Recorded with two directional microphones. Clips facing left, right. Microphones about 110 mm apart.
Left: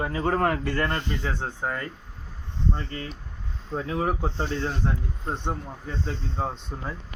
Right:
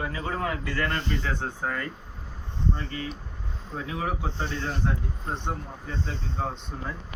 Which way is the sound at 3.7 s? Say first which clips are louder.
Left 4 dB; 40° left (ahead or behind).